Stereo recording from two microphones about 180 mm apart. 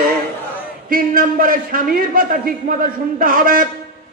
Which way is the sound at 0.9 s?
50° right (ahead or behind).